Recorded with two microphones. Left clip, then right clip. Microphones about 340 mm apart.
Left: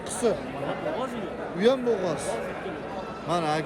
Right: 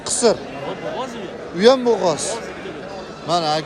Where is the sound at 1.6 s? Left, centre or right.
Right.